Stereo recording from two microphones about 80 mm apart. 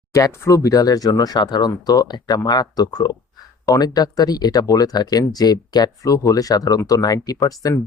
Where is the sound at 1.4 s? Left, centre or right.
Left.